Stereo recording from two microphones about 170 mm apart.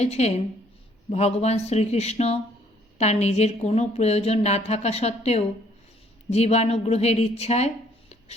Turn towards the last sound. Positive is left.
turn(degrees=40)  # may be behind; listen again after turning